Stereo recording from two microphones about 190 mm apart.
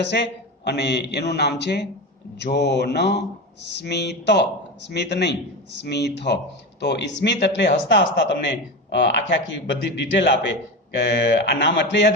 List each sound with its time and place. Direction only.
0.0 s a man's voice: 65° left (ahead or behind)